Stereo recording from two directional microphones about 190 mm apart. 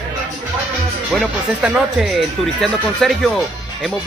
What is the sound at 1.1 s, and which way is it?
Speech, 5° right (ahead or behind).